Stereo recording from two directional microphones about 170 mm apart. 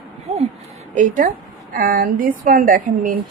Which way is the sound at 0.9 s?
50° right (ahead or behind).